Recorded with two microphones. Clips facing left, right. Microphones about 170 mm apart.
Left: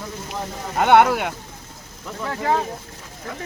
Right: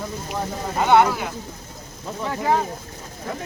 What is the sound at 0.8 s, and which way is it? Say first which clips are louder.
Speech: left 2 dB; 65° left (ahead or behind).